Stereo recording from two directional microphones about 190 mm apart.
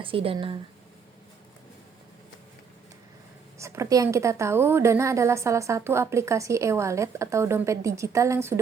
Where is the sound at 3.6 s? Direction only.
15° right (ahead or behind).